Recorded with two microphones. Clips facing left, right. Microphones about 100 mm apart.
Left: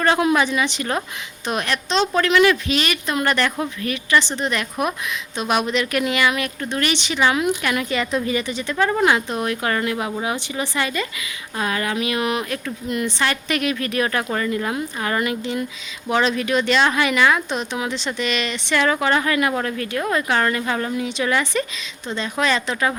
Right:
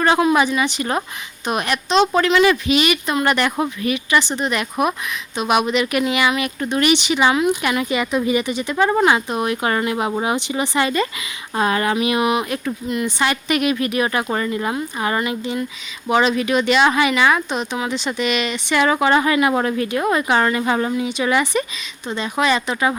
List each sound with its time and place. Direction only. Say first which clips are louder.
0.3 s speech: right 2 dB; 5° right (ahead or behind)
9.0 s speech: right 2 dB; 5° right (ahead or behind); by 11.9 s 30° right (ahead or behind)
11.9 s speech: right 4 dB; 20° right (ahead or behind)